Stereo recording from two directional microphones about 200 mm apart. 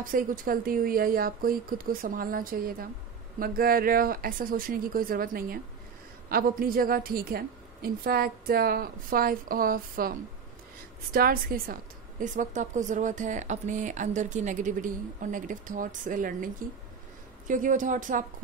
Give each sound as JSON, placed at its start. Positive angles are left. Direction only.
{"t": 0.0, "sound": "a woman's voice", "side_deg": -45}
{"t": 17.5, "sound": "a woman's voice", "side_deg": -40}